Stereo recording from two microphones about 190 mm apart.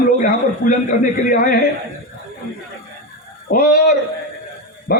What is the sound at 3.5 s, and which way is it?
Speech, 50° left (ahead or behind).